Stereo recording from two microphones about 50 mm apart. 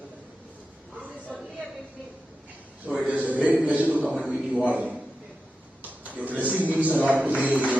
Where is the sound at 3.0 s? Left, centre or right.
Right.